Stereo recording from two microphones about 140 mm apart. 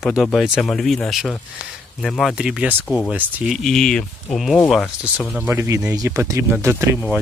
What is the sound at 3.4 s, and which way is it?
Speech, centre (ahead or behind).